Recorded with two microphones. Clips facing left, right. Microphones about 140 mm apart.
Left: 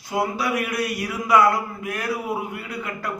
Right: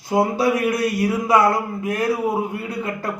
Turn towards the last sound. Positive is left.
turn(degrees=-25)  # may be behind; listen again after turning